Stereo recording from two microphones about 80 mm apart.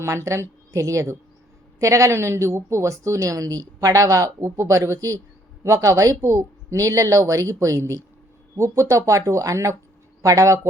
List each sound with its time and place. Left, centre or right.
0.0 s a woman's voice: right
4.4 s a woman's voice: right